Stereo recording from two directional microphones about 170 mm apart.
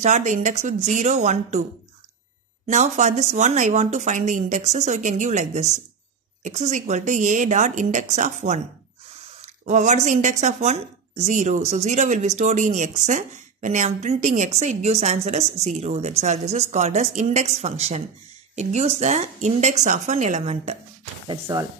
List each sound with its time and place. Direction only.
0.0 s a woman's voice: 45° right (ahead or behind)
2.6 s a woman's voice: 45° right (ahead or behind)
9.7 s a woman's voice: 45° right (ahead or behind)
21.5 s speech: 20° right (ahead or behind)